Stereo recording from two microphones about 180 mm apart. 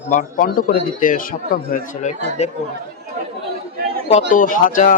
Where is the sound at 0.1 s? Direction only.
50° left (ahead or behind).